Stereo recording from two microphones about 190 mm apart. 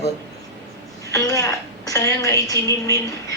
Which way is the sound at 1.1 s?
15° left (ahead or behind).